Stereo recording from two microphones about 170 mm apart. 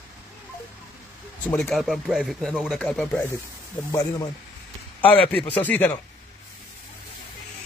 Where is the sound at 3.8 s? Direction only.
20° left (ahead or behind).